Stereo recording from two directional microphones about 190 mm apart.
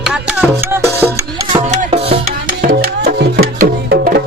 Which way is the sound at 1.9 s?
30° right (ahead or behind).